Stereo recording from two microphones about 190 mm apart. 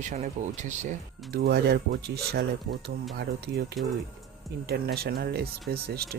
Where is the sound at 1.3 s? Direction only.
55° right (ahead or behind).